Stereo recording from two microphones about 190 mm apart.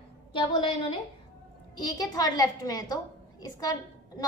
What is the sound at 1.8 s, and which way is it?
A child's voice, 20° left (ahead or behind).